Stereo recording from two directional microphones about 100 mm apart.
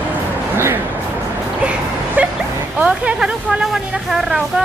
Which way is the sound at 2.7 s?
10° right (ahead or behind).